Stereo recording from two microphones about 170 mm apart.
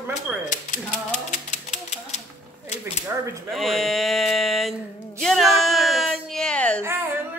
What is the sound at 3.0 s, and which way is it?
Speech, 15° right (ahead or behind).